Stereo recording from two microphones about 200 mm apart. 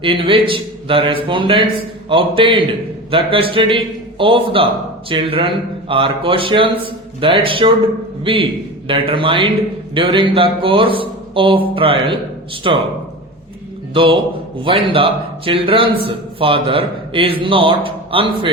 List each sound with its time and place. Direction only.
0.0 s a man's voice: 25° right (ahead or behind)
13.9 s a man's voice: 25° right (ahead or behind)